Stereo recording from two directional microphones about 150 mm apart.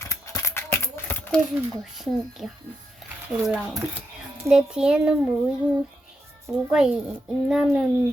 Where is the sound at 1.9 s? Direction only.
Centre (ahead or behind).